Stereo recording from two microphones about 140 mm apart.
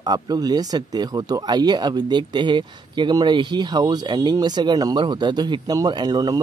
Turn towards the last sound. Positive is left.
turn(degrees=-25)  # may be behind; listen again after turning